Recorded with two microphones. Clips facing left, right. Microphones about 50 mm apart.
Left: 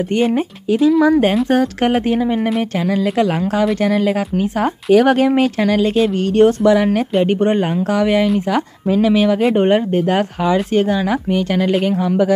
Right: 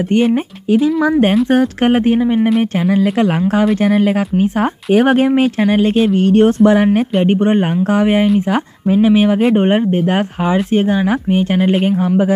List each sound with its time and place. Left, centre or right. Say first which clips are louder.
1.5 s speech: right 2 dB; right
2.9 s speech: right 1 dB; right
5.3 s speech: right 2 dB; centre
5.7 s speech: right 2 dB; right